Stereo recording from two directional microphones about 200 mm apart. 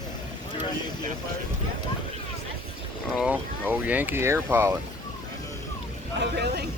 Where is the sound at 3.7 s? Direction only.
10° right (ahead or behind).